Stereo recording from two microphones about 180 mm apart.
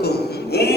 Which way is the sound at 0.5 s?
65° left (ahead or behind).